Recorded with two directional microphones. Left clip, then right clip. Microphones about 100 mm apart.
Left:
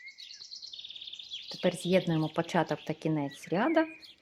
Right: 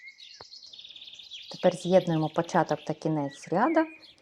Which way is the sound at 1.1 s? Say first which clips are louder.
Left 1 dB; 20° left (ahead or behind).